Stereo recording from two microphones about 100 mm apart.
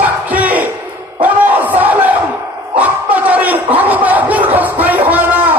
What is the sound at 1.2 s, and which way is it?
Battle cry, 15° right (ahead or behind).